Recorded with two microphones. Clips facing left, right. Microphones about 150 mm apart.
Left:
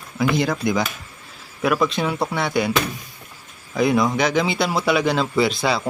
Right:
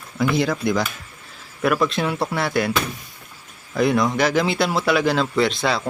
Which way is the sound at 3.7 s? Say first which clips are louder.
Even; centre (ahead or behind).